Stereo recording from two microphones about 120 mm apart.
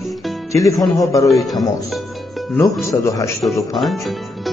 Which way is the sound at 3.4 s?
Centre (ahead or behind).